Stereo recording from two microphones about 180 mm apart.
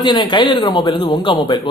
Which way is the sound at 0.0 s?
25° left (ahead or behind).